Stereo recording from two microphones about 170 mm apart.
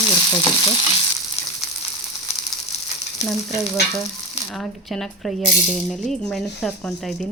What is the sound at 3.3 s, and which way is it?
Speech, centre (ahead or behind).